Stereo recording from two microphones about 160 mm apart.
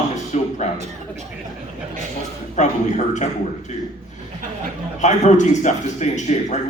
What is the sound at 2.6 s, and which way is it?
Speech, 50° left (ahead or behind).